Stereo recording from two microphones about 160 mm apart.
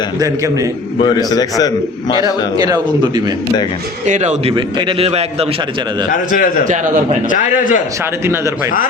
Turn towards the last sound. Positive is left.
turn(degrees=55)  # may be behind; listen again after turning